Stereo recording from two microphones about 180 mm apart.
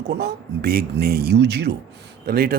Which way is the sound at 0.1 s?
70° right (ahead or behind).